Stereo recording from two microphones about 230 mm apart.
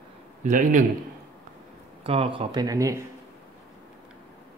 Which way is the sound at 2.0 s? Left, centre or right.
Right.